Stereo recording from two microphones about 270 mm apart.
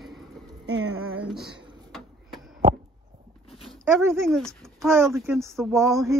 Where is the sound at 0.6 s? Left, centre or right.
Right.